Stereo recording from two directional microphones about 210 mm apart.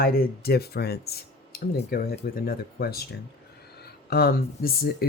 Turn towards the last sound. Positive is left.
turn(degrees=45)  # may be behind; listen again after turning